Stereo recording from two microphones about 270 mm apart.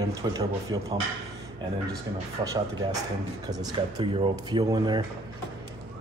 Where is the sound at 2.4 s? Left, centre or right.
Centre.